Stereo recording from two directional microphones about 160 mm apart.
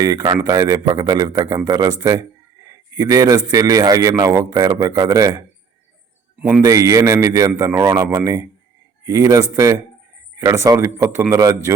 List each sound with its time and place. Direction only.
0.0 s a man's voice: 25° right (ahead or behind)
6.6 s a man's voice: 20° right (ahead or behind)